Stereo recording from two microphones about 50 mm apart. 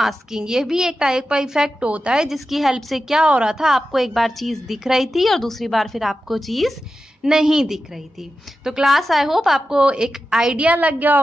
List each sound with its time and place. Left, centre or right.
0.0 s a woman's voice: centre
1.9 s a woman's voice: right
2.1 s a woman's voice: centre
3.3 s a woman's voice: right
3.5 s a woman's voice: centre
7.2 s a woman's voice: centre
9.8 s a woman's voice: centre
10.5 s a woman's voice: right